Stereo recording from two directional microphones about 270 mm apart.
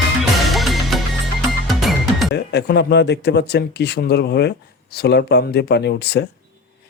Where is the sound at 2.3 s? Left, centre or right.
Left.